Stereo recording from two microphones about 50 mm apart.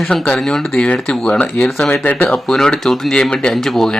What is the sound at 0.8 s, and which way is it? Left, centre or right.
Speech, centre.